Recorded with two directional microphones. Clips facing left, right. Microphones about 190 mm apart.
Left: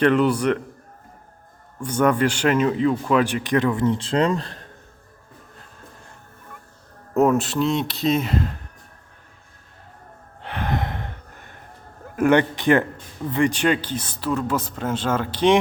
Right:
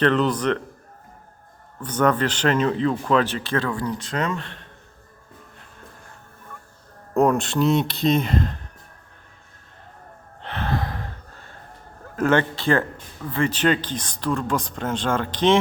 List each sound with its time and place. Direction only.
0.0 s speech: 10° left (ahead or behind)
1.8 s speech: 10° left (ahead or behind); by 4.6 s 35° left (ahead or behind)
7.2 s speech: 5° left (ahead or behind)
10.4 s a sound: 15° left (ahead or behind)
12.1 s speech: 15° left (ahead or behind)